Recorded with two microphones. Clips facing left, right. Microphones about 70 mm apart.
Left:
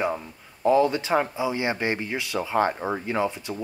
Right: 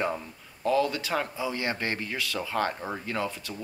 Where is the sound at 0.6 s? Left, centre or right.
Left.